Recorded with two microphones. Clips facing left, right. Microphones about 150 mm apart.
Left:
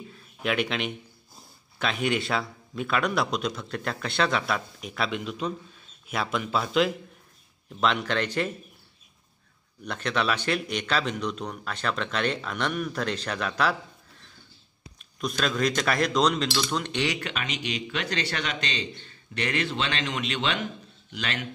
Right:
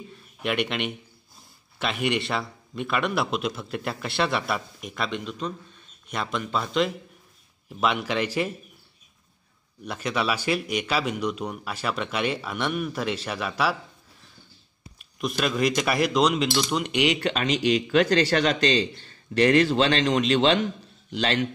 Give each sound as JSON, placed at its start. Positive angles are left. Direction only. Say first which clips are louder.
{"t": 0.1, "sound": "a man's voice", "louder": "even", "side_deg": 0}
{"t": 9.8, "sound": "a man's voice", "louder": "right 1 dB", "side_deg": -10}
{"t": 15.0, "sound": "a man's voice", "louder": "right 2 dB", "side_deg": -5}
{"t": 17.2, "sound": "a man's voice", "louder": "right 9 dB", "side_deg": -35}